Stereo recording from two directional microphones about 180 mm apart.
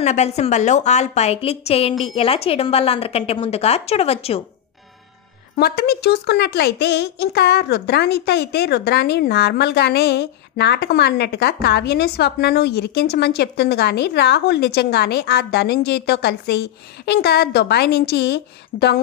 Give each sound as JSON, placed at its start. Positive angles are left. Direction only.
{"t": 0.0, "sound": "a woman's voice", "side_deg": 40}
{"t": 5.6, "sound": "a woman's voice", "side_deg": 60}